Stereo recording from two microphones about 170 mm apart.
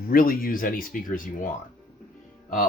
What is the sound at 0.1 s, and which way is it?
Speech, 60° left (ahead or behind).